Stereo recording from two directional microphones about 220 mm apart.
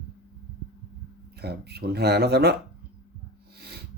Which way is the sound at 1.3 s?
45° right (ahead or behind).